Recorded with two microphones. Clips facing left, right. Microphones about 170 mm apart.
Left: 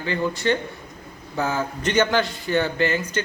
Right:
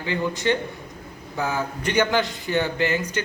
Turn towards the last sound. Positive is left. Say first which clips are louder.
# left 1 dB
turn(degrees=-15)  # may be behind; listen again after turning